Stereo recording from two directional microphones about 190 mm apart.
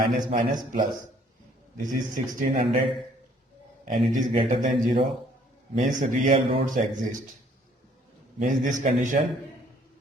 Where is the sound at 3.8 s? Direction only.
40° right (ahead or behind).